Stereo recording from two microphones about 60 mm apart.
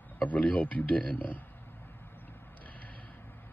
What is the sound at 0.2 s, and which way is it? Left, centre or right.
Speech, left.